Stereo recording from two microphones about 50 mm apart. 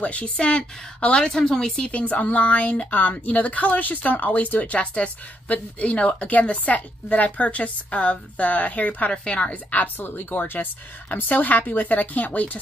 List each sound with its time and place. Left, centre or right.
0.0 s a woman's voice: left